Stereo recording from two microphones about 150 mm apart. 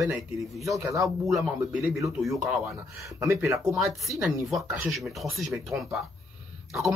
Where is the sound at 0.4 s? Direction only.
Centre (ahead or behind).